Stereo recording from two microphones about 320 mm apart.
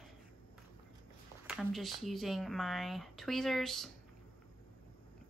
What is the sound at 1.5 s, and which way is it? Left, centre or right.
Speech, centre.